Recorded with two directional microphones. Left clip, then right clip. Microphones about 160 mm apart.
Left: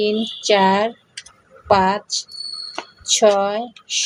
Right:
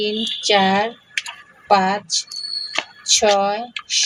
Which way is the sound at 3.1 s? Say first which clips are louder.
Left 1 dB; 20° left (ahead or behind).